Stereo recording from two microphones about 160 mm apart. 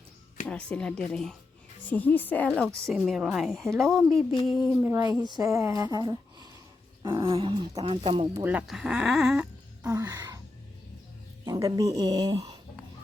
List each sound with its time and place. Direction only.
0.4 s a woman's voice: 5° left (ahead or behind)
4.8 s a woman's voice: 15° right (ahead or behind)
7.1 s dog: 35° right (ahead or behind)
8.4 s speech: 5° right (ahead or behind)
10.0 s wail: 25° right (ahead or behind)
11.4 s speech: 20° right (ahead or behind)